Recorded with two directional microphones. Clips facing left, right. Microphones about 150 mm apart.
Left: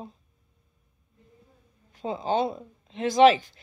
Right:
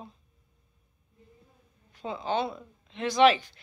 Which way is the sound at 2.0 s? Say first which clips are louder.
Left 4 dB; 35° left (ahead or behind).